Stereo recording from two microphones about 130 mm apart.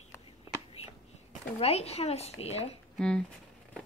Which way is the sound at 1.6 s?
55° left (ahead or behind).